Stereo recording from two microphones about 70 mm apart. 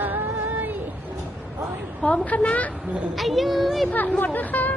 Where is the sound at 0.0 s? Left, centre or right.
Right.